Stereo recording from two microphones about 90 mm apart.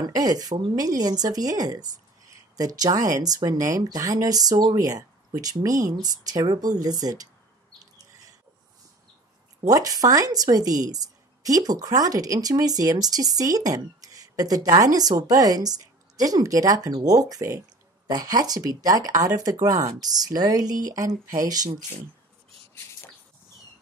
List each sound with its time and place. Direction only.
0.0 s a woman's voice: 45° right (ahead or behind)
9.7 s a woman's voice: 40° right (ahead or behind)